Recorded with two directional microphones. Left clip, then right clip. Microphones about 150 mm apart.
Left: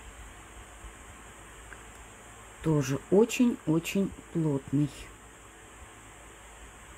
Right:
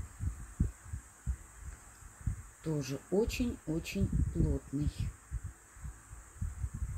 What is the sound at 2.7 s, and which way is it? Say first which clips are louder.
Speech: left 9 dB; 35° left (ahead or behind).